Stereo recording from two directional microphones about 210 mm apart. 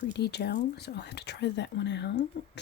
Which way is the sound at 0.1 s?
50° left (ahead or behind).